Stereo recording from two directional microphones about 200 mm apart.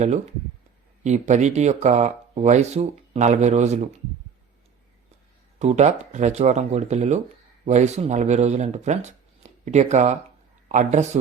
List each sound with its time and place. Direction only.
1.0 s speech: 35° right (ahead or behind)
5.5 s speech: 35° right (ahead or behind)